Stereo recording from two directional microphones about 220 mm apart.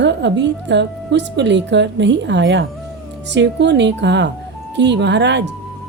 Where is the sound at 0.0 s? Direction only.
55° right (ahead or behind).